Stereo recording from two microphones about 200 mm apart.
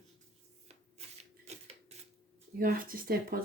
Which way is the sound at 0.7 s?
35° right (ahead or behind).